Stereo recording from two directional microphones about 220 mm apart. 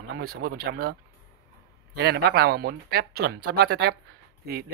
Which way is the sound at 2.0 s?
45° right (ahead or behind).